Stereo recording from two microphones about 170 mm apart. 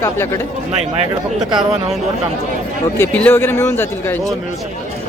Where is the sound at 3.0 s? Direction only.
10° left (ahead or behind).